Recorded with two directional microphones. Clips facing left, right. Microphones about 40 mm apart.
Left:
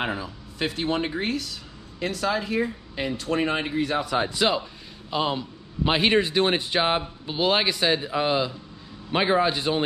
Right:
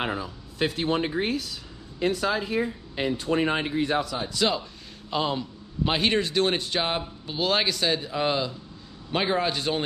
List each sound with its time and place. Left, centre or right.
0.0 s speech: centre
4.0 s speech: left
4.3 s a man's voice: centre
5.1 s a man's voice: centre